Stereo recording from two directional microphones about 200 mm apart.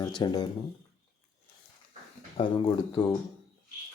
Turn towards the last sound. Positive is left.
turn(degrees=15)  # may be behind; listen again after turning